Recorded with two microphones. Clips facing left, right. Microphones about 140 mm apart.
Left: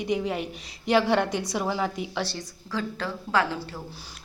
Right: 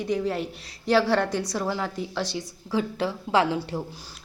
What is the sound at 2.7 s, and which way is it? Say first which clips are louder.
A woman's voice: right 4 dB; 20° right (ahead or behind).